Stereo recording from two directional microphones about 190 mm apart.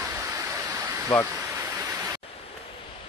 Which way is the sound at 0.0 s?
15° right (ahead or behind).